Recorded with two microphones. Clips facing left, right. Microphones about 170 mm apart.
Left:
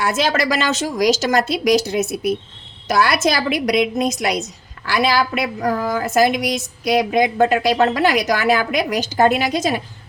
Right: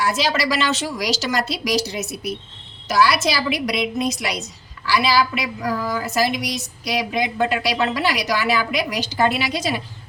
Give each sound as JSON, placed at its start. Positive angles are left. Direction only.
{"t": 0.0, "sound": "a woman's voice", "side_deg": 55}